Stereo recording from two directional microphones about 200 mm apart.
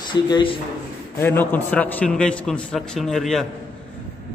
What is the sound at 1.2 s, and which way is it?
A man's voice, 10° left (ahead or behind).